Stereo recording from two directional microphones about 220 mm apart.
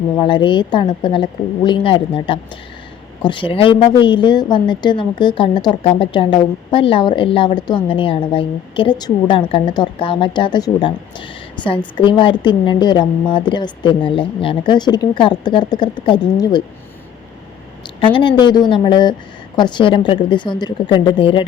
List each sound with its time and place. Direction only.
0.2 s a woman's voice: 20° left (ahead or behind)
17.8 s a woman's voice: 20° left (ahead or behind)